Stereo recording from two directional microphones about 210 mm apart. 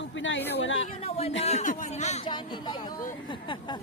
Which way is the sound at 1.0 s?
30° left (ahead or behind).